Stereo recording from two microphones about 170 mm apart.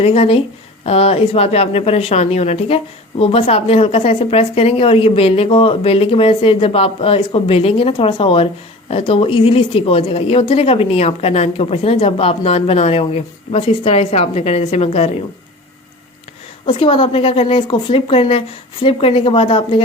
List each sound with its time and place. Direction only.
0.0 s speech: 35° left (ahead or behind)
16.6 s speech: 30° left (ahead or behind)